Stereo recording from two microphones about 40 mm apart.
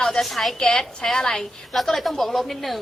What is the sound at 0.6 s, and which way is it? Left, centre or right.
Speech, centre.